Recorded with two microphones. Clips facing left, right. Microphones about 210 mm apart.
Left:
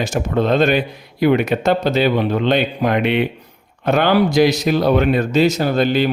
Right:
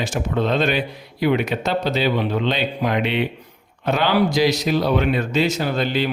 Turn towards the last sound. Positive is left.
turn(degrees=45)  # may be behind; listen again after turning